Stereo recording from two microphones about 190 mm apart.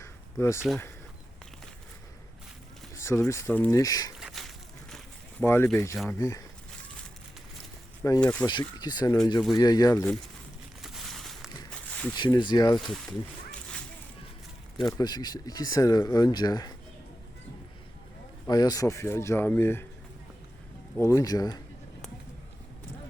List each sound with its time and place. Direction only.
0.0 s a sound: 15° left (ahead or behind)
2.9 s speech: 15° left (ahead or behind)
4.2 s a sound: centre (ahead or behind)
5.4 s speech: 10° left (ahead or behind)
8.2 s speech: 5° left (ahead or behind)
8.4 s speech: 20° left (ahead or behind)
10.8 s a sound: centre (ahead or behind)
12.1 s speech: 25° left (ahead or behind)
12.8 s speech: centre (ahead or behind)
14.8 s speech: 20° left (ahead or behind)
18.4 s speech: 20° left (ahead or behind)
21.0 s speech: 15° left (ahead or behind)